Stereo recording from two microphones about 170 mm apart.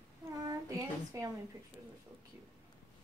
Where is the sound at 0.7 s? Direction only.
20° right (ahead or behind).